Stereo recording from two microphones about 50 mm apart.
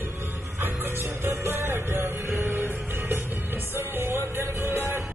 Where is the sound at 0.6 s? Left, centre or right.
Right.